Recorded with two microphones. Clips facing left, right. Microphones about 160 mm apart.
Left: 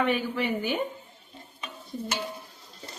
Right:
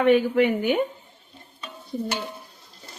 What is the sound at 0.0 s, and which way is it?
Speech, 60° right (ahead or behind).